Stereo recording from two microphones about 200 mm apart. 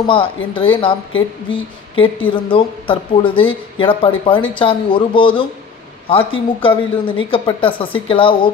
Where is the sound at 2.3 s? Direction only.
25° left (ahead or behind).